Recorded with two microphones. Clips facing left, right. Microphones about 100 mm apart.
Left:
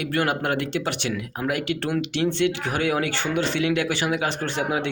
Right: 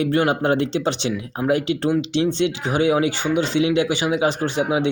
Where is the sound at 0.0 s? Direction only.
25° right (ahead or behind).